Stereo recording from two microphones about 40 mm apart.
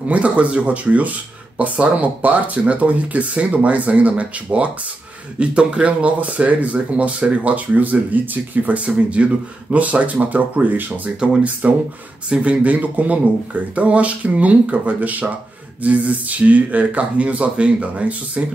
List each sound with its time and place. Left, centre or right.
0.1 s speech: right
11.2 s speech: right
11.6 s speech: right